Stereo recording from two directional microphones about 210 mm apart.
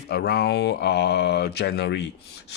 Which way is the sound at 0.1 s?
50° left (ahead or behind).